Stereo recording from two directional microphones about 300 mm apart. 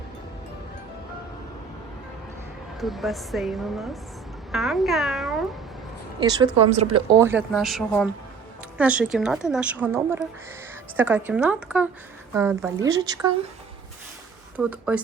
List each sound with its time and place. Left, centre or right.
2.8 s a woman's voice: centre
6.2 s speech: centre
7.2 s a woman's voice: centre
14.5 s a woman's voice: centre